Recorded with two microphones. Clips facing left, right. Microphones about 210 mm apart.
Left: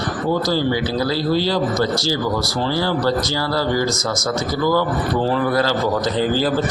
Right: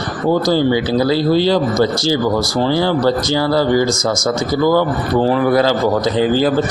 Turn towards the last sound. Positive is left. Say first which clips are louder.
# right 5 dB
turn(degrees=-15)  # may be behind; listen again after turning